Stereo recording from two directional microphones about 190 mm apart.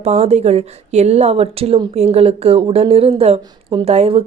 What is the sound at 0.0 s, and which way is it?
Speech, 35° right (ahead or behind).